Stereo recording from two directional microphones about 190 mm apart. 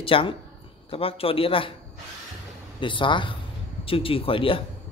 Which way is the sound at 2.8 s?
25° left (ahead or behind).